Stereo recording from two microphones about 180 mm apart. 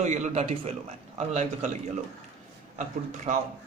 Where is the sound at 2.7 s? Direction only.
40° right (ahead or behind).